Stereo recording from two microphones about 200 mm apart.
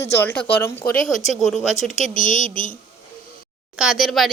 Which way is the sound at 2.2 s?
40° left (ahead or behind).